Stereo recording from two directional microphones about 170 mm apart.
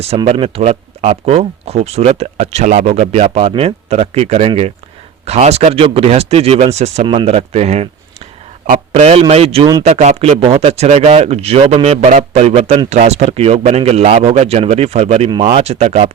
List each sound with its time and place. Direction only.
0.3 s speech: 35° right (ahead or behind)
8.6 s a man's voice: 55° right (ahead or behind)
9.0 s speech: 35° right (ahead or behind)